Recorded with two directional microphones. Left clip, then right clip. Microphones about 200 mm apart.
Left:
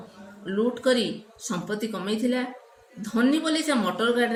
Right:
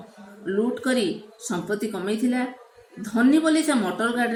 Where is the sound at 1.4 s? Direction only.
45° left (ahead or behind).